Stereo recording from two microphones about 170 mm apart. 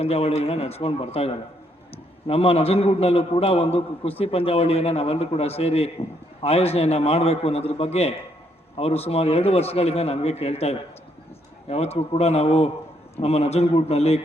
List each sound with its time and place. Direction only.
0.0 s a man's voice: 35° left (ahead or behind)